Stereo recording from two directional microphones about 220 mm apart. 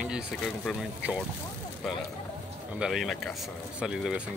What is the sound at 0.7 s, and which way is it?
Speech, centre (ahead or behind).